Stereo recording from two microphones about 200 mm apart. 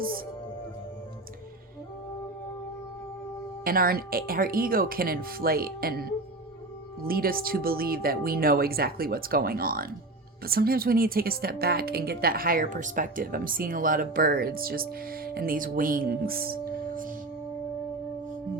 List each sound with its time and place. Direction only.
3.6 s speech: 45° right (ahead or behind)